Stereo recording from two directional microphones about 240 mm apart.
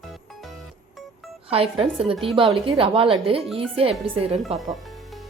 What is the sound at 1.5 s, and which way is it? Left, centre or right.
Speech, right.